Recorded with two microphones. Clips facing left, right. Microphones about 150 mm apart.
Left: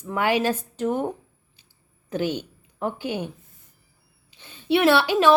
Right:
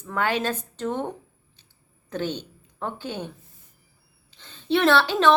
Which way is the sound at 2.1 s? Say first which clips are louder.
Left 3 dB; 10° left (ahead or behind).